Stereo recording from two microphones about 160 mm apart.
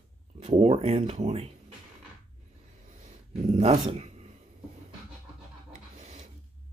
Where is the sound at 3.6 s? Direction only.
40° right (ahead or behind).